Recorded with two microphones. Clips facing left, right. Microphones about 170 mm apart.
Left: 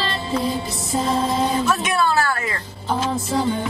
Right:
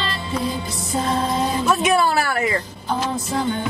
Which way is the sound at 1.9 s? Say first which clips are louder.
Right 1 dB; 20° right (ahead or behind).